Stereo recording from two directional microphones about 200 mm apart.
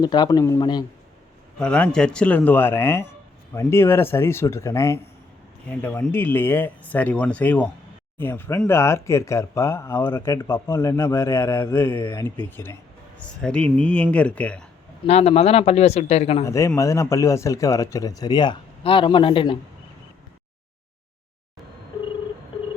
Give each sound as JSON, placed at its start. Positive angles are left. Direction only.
{"t": 0.0, "sound": "speech", "side_deg": 20}
{"t": 1.5, "sound": "speech", "side_deg": 5}
{"t": 15.0, "sound": "speech", "side_deg": 30}
{"t": 16.4, "sound": "speech", "side_deg": 15}